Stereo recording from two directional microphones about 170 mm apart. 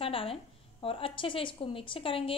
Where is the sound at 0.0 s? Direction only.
35° left (ahead or behind).